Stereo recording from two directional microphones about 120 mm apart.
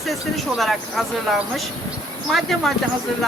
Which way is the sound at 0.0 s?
Centre (ahead or behind).